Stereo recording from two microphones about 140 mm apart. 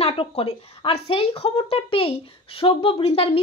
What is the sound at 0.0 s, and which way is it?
A woman's voice, 40° left (ahead or behind).